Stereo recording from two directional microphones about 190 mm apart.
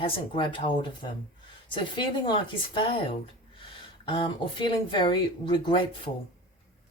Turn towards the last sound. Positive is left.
turn(degrees=25)  # may be behind; listen again after turning